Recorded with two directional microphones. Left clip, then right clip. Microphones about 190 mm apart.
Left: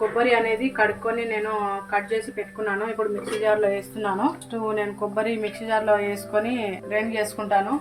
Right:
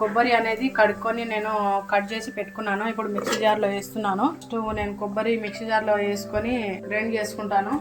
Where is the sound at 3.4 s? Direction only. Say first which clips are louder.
Left 2 dB; 40° right (ahead or behind).